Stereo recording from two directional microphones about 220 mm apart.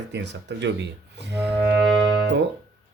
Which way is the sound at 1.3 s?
5° right (ahead or behind).